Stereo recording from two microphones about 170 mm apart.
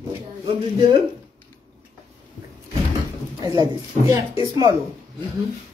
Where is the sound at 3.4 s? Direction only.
20° right (ahead or behind).